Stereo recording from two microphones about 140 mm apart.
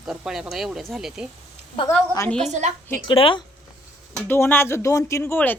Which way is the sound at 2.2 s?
5° left (ahead or behind).